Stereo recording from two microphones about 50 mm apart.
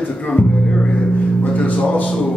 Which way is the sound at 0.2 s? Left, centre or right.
Left.